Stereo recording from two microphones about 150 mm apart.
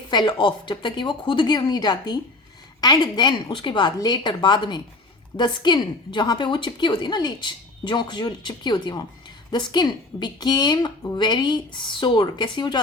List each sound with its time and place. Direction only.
0.1 s a woman's voice: 30° left (ahead or behind)